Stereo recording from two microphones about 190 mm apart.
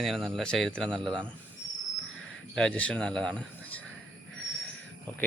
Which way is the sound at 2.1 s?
90° left.